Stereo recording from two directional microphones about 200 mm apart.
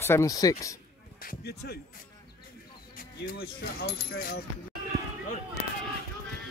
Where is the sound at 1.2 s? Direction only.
50° left (ahead or behind).